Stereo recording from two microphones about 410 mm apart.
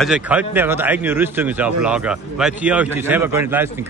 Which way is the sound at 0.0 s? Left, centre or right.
Centre.